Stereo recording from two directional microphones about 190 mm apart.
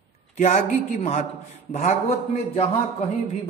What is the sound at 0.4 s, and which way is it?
A man's voice, 35° left (ahead or behind).